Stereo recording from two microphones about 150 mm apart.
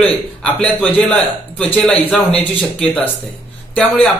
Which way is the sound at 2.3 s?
40° left (ahead or behind).